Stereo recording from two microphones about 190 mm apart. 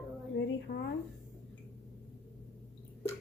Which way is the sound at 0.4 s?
65° left (ahead or behind).